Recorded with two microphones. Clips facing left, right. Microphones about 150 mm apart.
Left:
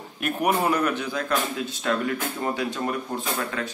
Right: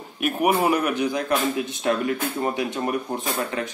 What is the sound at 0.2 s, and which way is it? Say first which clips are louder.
A man's voice: right 3 dB; 5° right (ahead or behind).